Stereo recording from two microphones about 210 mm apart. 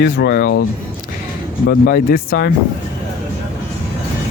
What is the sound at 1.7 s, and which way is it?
Speech, 45° left (ahead or behind).